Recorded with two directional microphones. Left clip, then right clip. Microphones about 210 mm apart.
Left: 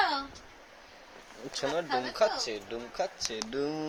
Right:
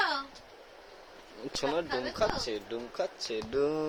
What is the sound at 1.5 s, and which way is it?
Speech, 10° right (ahead or behind).